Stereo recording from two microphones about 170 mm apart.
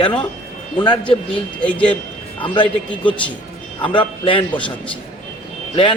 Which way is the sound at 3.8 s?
30° left (ahead or behind).